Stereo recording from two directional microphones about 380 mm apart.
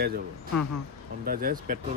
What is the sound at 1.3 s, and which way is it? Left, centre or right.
Speech, right.